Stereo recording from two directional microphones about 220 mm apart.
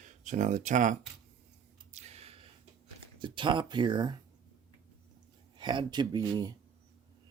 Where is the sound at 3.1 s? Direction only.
20° right (ahead or behind).